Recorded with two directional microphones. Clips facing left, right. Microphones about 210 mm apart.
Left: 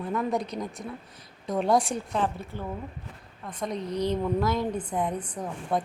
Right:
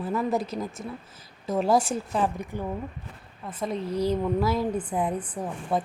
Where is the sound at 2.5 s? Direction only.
15° right (ahead or behind).